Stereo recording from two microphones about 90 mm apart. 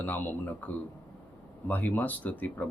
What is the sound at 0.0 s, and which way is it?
A man's voice, 20° left (ahead or behind).